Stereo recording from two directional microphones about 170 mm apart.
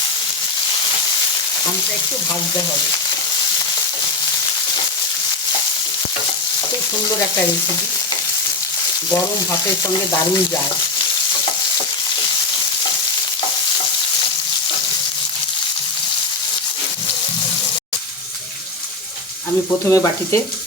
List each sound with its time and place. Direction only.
19.9 s frying: 15° left (ahead or behind)